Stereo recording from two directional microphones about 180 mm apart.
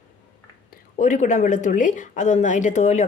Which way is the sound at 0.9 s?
45° left (ahead or behind).